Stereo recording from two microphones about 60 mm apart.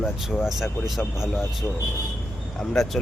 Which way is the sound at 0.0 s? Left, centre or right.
Centre.